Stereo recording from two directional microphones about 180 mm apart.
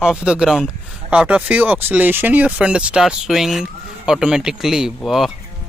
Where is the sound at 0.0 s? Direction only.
5° right (ahead or behind).